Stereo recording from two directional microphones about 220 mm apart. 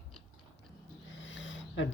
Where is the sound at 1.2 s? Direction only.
55° left (ahead or behind).